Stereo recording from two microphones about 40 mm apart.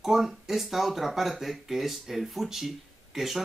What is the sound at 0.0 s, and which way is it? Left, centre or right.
Speech, centre.